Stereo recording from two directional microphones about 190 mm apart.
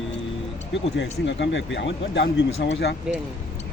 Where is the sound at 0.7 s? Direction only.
70° left (ahead or behind).